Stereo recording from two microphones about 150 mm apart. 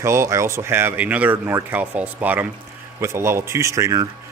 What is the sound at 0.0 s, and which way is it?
A man's voice, 20° right (ahead or behind).